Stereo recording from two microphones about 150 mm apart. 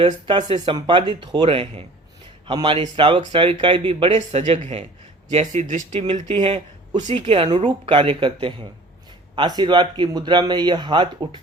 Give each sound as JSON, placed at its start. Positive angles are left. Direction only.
{"t": 0.0, "sound": "speech", "side_deg": -35}
{"t": 0.4, "sound": "speech", "side_deg": -50}
{"t": 0.7, "sound": "speech", "side_deg": -30}